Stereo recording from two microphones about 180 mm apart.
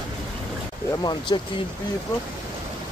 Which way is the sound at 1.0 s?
25° left (ahead or behind).